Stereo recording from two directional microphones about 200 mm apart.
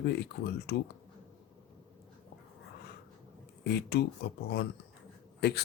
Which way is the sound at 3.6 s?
55° left (ahead or behind).